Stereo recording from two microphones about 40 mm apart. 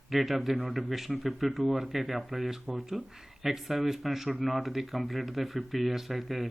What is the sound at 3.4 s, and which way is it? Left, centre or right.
Speech, centre.